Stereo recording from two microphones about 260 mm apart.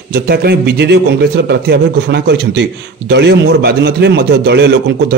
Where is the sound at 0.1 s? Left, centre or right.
Right.